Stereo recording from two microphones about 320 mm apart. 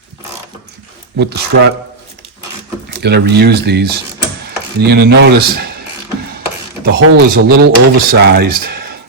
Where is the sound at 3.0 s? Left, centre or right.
Right.